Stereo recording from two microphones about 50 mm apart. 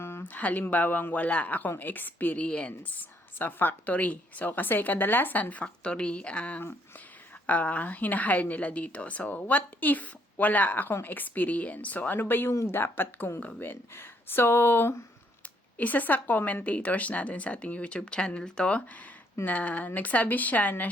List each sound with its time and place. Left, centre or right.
0.0 s a sound: left
0.3 s a sound: left
0.7 s a woman's voice: left
5.6 s a woman's voice: centre; by 14.9 s left
15.8 s a woman's voice: left
16.6 s speech: left
19.5 s a woman's voice: left